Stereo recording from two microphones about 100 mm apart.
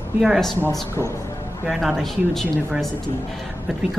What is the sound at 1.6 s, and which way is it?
Speech, 5° right (ahead or behind).